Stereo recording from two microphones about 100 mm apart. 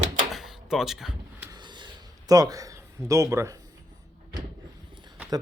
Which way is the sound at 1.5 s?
45° right (ahead or behind).